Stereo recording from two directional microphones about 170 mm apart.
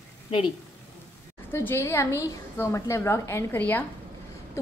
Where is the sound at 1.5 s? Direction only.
15° left (ahead or behind).